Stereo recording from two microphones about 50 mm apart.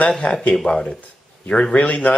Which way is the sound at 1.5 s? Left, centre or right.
Left.